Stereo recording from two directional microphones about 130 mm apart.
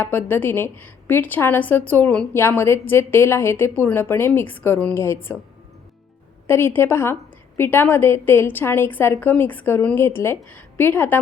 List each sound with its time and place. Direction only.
0.0 s a woman's voice: 15° left (ahead or behind)
6.5 s a woman's voice: 20° left (ahead or behind)